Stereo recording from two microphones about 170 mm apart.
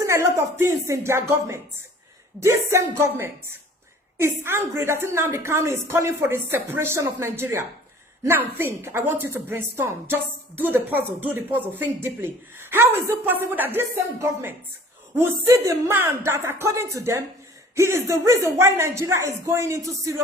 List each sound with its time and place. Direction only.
0.0 s a woman's voice: 15° right (ahead or behind)